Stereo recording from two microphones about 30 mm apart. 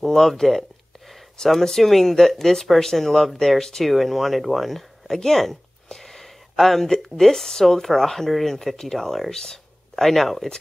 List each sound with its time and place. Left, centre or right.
0.0 s speech: centre
1.4 s speech: left
1.8 s speech: centre
3.3 s speech: centre
3.9 s speech: centre
9.3 s speech: centre
9.9 s speech: centre